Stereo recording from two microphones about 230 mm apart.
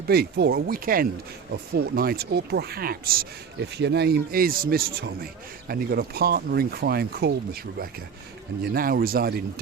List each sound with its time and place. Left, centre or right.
0.1 s speech: right